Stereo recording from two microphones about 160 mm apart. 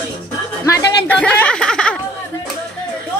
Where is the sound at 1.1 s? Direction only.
10° left (ahead or behind).